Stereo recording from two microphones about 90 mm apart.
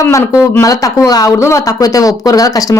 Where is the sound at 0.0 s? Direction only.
35° left (ahead or behind).